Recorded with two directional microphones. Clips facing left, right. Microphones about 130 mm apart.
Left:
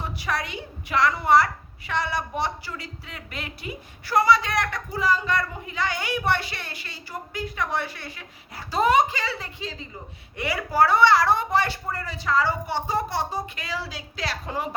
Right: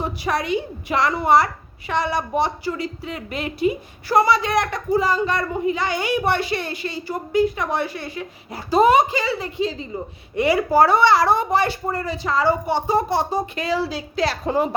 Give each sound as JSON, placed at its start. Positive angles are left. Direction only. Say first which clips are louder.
{"t": 0.0, "sound": "a woman's voice", "louder": "right 6 dB", "side_deg": -20}